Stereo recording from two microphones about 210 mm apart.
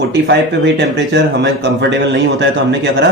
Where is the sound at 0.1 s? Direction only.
55° right (ahead or behind).